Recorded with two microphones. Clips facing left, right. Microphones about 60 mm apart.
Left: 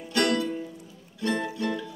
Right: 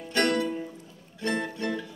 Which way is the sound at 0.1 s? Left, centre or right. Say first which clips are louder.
Even; right.